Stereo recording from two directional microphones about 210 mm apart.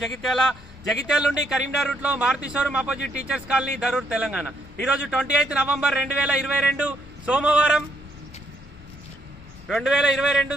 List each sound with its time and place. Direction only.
0.0 s a man's voice: centre (ahead or behind)
9.7 s a man's voice: centre (ahead or behind)